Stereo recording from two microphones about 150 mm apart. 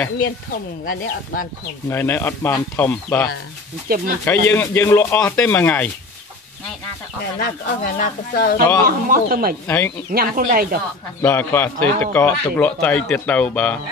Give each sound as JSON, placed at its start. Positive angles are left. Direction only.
{"t": 0.8, "sound": "speech", "side_deg": 65}
{"t": 1.9, "sound": "a man's voice", "side_deg": 15}
{"t": 7.3, "sound": "speech", "side_deg": 80}
{"t": 8.8, "sound": "speech", "side_deg": -80}
{"t": 9.7, "sound": "a man's voice", "side_deg": 15}
{"t": 10.1, "sound": "speech", "side_deg": -70}
{"t": 11.2, "sound": "a man's voice", "side_deg": 15}